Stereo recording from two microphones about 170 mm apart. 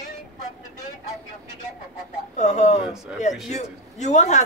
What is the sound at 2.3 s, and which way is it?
A man's voice, 45° left (ahead or behind).